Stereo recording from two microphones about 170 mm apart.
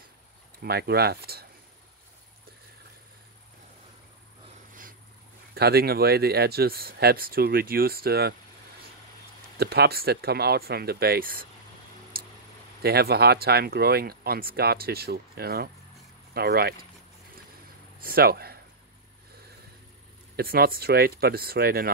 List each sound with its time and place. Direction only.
0.7 s speech: 70° right (ahead or behind)
5.5 s speech: 65° right (ahead or behind)
9.6 s speech: 65° right (ahead or behind)
12.8 s speech: 65° right (ahead or behind)
18.0 s speech: 60° right (ahead or behind)
20.3 s speech: 60° right (ahead or behind)